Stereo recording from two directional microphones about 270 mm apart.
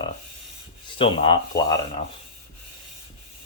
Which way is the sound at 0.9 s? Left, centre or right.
Centre.